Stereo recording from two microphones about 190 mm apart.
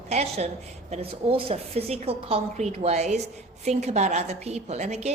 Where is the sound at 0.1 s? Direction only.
35° right (ahead or behind).